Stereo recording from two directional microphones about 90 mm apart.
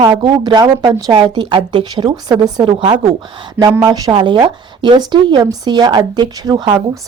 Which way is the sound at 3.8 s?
50° right (ahead or behind).